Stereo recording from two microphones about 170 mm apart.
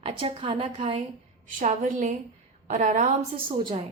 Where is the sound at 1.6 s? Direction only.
45° right (ahead or behind).